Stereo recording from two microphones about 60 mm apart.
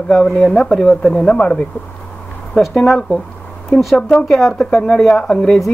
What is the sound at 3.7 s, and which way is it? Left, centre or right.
Speech, centre.